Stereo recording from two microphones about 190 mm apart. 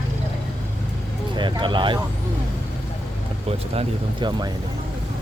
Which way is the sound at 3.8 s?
25° right (ahead or behind).